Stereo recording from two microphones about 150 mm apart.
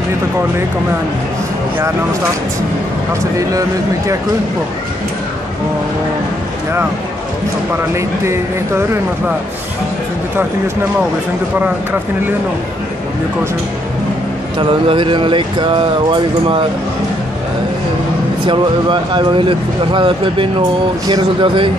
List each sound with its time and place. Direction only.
7.7 s speech: 20° right (ahead or behind)
14.6 s speech: 35° right (ahead or behind)
18.4 s speech: 35° right (ahead or behind)